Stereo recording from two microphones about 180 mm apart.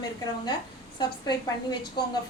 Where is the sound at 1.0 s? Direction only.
25° left (ahead or behind).